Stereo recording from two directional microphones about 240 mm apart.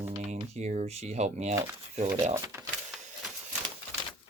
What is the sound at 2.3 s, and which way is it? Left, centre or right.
Speech, centre.